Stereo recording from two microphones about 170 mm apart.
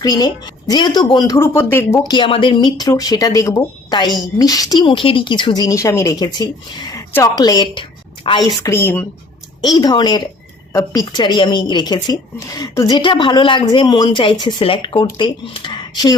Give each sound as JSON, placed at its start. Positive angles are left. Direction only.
{"t": 0.0, "sound": "speech", "side_deg": 25}
{"t": 2.0, "sound": "a woman's voice", "side_deg": 30}
{"t": 9.6, "sound": "speech", "side_deg": 25}